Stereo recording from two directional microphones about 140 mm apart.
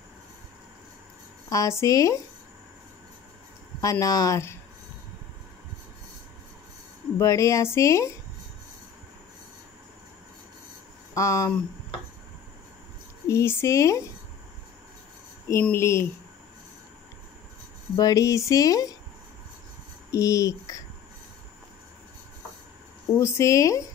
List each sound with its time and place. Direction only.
1.5 s speech: 20° left (ahead or behind)
3.8 s speech: 25° left (ahead or behind)
7.2 s speech: 20° left (ahead or behind)
11.1 s speech: 20° left (ahead or behind)
13.3 s speech: 20° left (ahead or behind)
15.5 s speech: 15° left (ahead or behind)
17.9 s speech: 25° left (ahead or behind)
20.1 s speech: 25° left (ahead or behind)
23.1 s speech: 20° left (ahead or behind)